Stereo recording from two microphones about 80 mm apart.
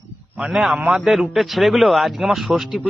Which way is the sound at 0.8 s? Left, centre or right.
Right.